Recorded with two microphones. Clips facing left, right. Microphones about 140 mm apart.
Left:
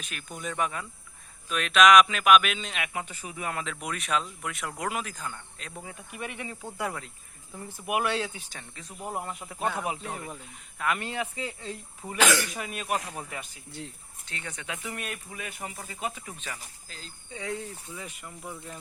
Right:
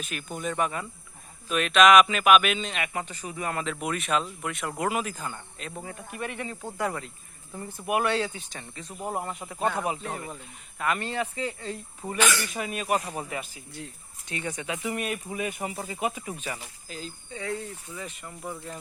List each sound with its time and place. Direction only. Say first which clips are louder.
0.0 s speech: right 5 dB; centre (ahead or behind)
6.1 s speech: right 3 dB; 10° left (ahead or behind)
12.0 s speech: right 4 dB; 20° right (ahead or behind)
12.5 s speech: right 4 dB; centre (ahead or behind)
17.3 s speech: right 1 dB; 15° left (ahead or behind)
18.2 s speech: right 3 dB; centre (ahead or behind)